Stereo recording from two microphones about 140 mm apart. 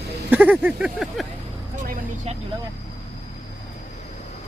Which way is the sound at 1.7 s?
65° right (ahead or behind).